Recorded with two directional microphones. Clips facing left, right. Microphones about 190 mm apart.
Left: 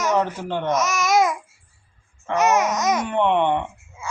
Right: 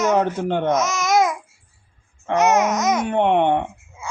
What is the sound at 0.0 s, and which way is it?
Speech, 55° right (ahead or behind).